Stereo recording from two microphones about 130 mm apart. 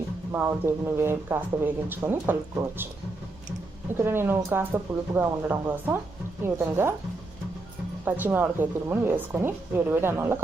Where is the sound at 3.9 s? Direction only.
15° right (ahead or behind).